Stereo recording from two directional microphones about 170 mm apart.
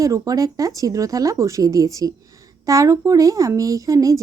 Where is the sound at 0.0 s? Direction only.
20° right (ahead or behind).